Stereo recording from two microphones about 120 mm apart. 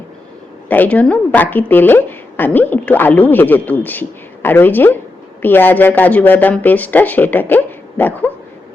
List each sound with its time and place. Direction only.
0.7 s a woman's voice: 15° left (ahead or behind)